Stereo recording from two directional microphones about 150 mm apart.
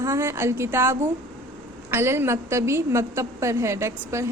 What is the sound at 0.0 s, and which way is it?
A woman's voice, 20° right (ahead or behind).